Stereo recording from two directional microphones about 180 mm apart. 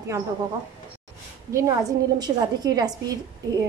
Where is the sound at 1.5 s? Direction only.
20° right (ahead or behind).